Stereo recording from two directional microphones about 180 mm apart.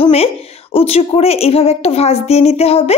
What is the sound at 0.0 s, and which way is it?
A woman's voice, 35° left (ahead or behind).